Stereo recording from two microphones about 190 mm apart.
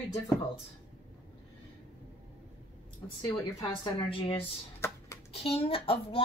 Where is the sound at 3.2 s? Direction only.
20° left (ahead or behind).